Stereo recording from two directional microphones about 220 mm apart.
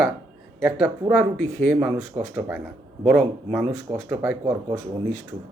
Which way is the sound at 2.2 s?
25° right (ahead or behind).